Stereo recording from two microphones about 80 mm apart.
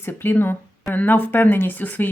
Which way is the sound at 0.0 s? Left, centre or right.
Left.